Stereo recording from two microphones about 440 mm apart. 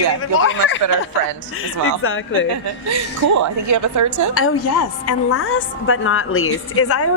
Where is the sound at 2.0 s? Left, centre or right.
Left.